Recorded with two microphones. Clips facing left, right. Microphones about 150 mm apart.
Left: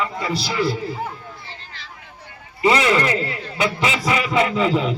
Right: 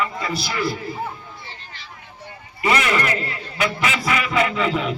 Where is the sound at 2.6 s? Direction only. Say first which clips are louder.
Left 3 dB; 25° left (ahead or behind).